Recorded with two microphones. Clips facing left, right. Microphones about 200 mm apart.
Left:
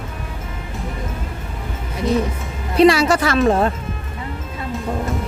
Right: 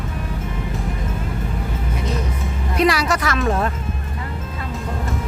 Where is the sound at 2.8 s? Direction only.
30° left (ahead or behind).